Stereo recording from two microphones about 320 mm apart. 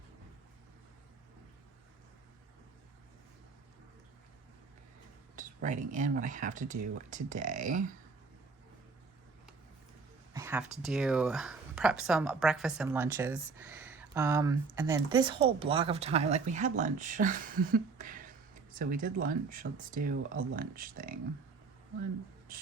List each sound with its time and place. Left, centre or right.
5.4 s speech: right
10.3 s speech: centre; by 21.2 s right